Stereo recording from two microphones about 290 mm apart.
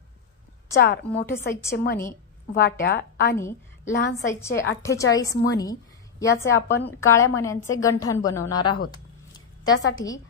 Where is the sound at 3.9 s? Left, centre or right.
Left.